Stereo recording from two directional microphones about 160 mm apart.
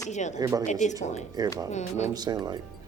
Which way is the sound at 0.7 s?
50° left (ahead or behind).